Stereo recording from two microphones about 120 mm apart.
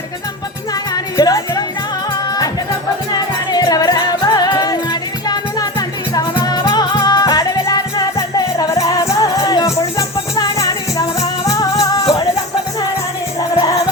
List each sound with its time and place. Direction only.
1.1 s music: 30° left (ahead or behind)
3.5 s music: 30° left (ahead or behind)